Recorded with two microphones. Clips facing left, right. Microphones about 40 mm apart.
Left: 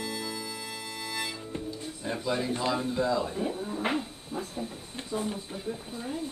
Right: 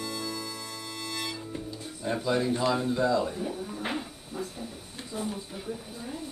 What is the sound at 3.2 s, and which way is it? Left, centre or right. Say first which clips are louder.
Speech: left 2 dB; left.